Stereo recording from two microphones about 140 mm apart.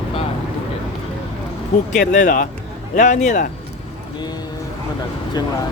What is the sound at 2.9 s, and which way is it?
Speech, 60° left (ahead or behind).